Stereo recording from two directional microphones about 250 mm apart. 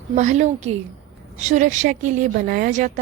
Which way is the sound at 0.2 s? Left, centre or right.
Right.